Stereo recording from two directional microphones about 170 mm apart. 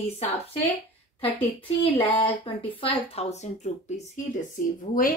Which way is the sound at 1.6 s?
30° left (ahead or behind).